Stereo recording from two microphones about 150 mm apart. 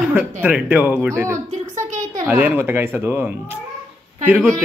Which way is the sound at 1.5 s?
55° right (ahead or behind).